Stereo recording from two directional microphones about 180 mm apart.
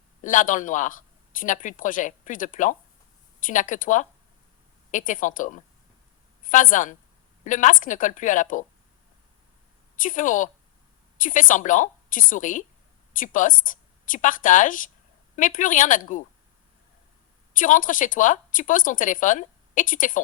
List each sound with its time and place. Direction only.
0.2 s a woman's voice: 45° left (ahead or behind)
9.9 s speech: 45° left (ahead or behind)
17.5 s speech: 50° left (ahead or behind)